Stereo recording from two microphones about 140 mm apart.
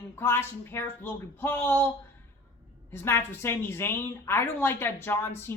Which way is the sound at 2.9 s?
15° left (ahead or behind).